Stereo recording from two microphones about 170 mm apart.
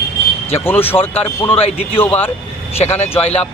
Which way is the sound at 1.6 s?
35° left (ahead or behind).